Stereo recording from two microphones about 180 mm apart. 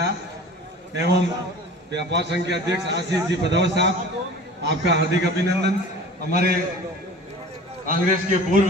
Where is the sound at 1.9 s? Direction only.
70° right (ahead or behind).